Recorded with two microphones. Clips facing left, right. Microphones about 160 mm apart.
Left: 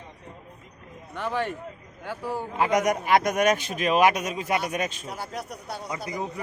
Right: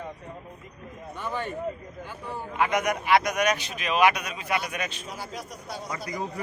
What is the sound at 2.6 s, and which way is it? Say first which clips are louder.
A man's voice: left 2 dB; 40° left (ahead or behind).